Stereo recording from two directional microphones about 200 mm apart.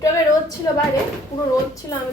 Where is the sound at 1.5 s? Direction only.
15° left (ahead or behind).